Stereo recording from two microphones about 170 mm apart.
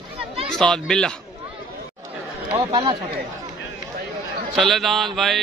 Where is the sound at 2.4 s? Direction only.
20° right (ahead or behind).